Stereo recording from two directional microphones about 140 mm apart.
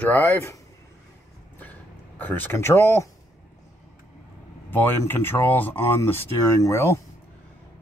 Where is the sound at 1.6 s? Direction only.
10° left (ahead or behind).